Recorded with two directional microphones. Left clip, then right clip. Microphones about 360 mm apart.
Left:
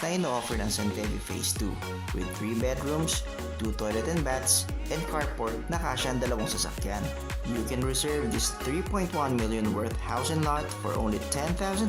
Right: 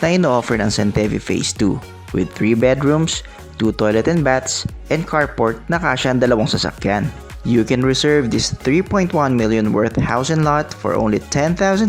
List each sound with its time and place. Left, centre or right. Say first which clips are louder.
0.0 s speech: right 14 dB; left